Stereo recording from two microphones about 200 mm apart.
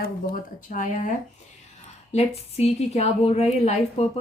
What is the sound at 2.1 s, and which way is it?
A woman's voice, 30° left (ahead or behind).